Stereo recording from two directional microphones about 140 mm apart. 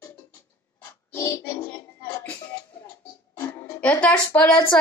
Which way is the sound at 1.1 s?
20° left (ahead or behind).